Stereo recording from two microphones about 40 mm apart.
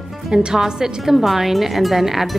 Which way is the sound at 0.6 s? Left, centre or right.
Centre.